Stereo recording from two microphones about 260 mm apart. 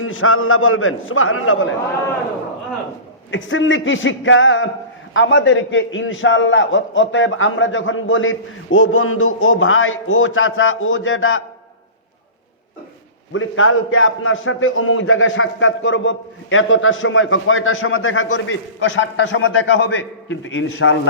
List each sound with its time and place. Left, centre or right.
0.0 s a man's voice: left
3.3 s a man's voice: left
13.3 s a man's voice: left